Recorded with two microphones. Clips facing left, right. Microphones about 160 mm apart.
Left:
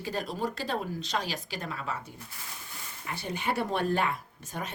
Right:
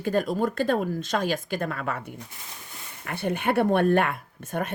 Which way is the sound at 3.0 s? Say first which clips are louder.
Right 7 dB; 60° right (ahead or behind).